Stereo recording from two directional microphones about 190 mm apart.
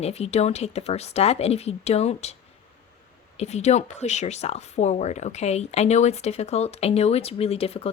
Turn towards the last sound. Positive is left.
turn(degrees=30)  # may be behind; listen again after turning